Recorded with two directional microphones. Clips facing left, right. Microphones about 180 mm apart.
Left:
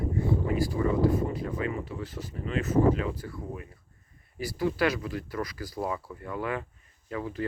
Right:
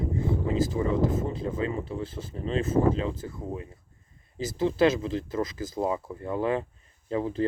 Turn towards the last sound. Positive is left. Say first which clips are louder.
# right 6 dB
turn(degrees=-30)  # may be behind; listen again after turning